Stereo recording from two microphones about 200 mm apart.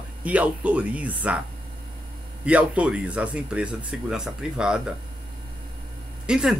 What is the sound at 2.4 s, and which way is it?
A man's voice, 5° right (ahead or behind).